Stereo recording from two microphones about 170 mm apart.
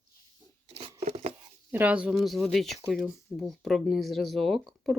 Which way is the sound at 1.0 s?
40° right (ahead or behind).